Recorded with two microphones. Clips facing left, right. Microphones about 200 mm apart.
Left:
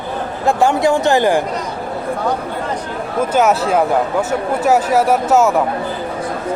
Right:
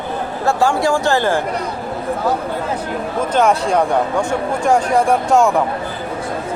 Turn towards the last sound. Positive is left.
turn(degrees=5)  # may be behind; listen again after turning